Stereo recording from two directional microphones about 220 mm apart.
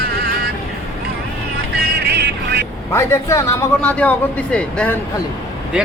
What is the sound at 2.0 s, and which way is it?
Music, 50° right (ahead or behind).